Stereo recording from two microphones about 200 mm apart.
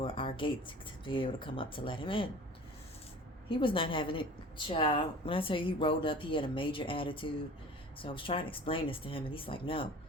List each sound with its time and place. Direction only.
0.0 s a sound: 25° left (ahead or behind)
1.0 s a woman's voice: 25° left (ahead or behind)
3.5 s a woman's voice: 25° left (ahead or behind)